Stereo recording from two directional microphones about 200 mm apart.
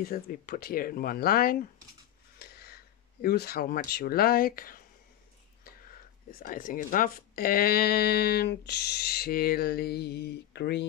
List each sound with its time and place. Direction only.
0.0 s speech: 45° left (ahead or behind)
6.4 s speech: 45° left (ahead or behind)